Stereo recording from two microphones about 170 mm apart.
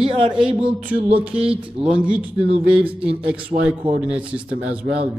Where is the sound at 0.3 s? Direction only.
5° right (ahead or behind).